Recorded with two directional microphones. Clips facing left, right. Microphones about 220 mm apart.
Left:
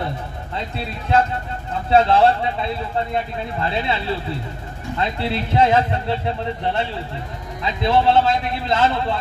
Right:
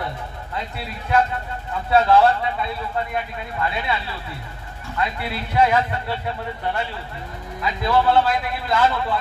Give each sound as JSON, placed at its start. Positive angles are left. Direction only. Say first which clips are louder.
{"t": 1.9, "sound": "speech", "louder": "left 1 dB", "side_deg": 25}